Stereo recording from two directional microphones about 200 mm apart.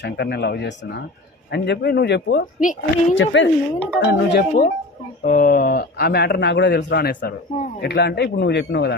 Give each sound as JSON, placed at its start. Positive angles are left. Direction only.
{"t": 0.0, "sound": "speech", "side_deg": 55}
{"t": 2.6, "sound": "speech", "side_deg": 40}
{"t": 3.2, "sound": "speech", "side_deg": 65}
{"t": 4.0, "sound": "a man's voice", "side_deg": 55}